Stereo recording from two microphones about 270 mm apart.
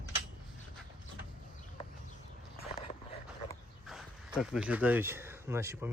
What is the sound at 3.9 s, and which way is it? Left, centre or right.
Speech, centre.